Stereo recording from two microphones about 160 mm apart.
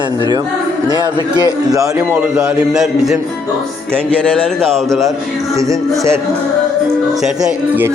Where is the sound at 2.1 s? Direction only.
5° right (ahead or behind).